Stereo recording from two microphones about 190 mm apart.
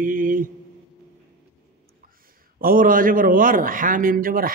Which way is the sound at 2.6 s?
50° right (ahead or behind).